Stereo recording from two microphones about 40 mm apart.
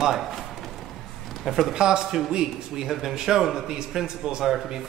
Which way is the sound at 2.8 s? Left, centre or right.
Centre.